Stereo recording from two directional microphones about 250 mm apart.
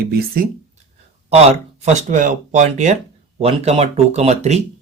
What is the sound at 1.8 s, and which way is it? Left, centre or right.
Speech, right.